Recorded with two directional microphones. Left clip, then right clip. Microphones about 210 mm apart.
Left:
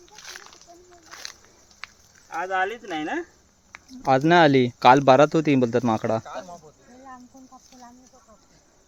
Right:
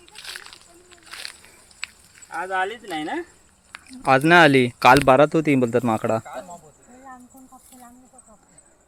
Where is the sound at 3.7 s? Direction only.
Centre (ahead or behind).